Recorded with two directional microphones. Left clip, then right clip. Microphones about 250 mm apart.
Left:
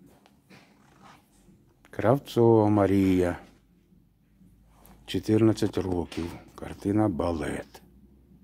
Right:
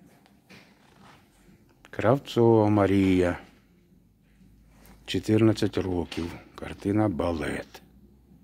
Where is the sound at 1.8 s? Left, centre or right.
Centre.